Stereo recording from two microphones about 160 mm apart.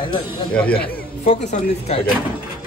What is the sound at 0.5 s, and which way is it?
Speech, 5° left (ahead or behind).